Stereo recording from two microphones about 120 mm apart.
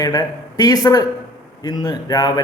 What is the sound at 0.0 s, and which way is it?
Speech, 30° left (ahead or behind).